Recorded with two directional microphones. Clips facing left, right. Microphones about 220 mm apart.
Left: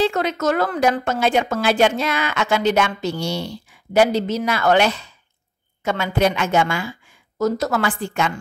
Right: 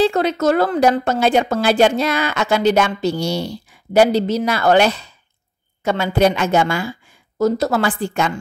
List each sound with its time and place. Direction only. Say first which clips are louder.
0.0 s a woman's voice: right 4 dB; 35° right (ahead or behind)